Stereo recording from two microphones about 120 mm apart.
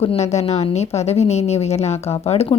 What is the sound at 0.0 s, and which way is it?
A woman's voice, 60° left (ahead or behind).